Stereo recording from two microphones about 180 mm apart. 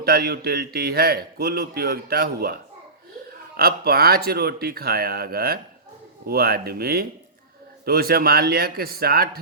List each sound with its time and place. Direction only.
0.0 s a man's voice: 60° right (ahead or behind)
3.6 s a man's voice: 55° right (ahead or behind)